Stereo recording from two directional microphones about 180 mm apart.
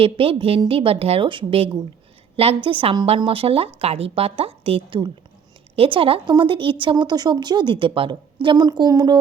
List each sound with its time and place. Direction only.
0.0 s a woman's voice: 30° right (ahead or behind)